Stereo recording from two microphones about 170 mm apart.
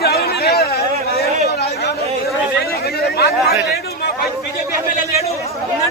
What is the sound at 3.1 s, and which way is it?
Speech, 70° left (ahead or behind).